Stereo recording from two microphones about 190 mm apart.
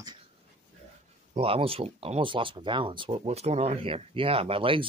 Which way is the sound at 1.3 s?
30° right (ahead or behind).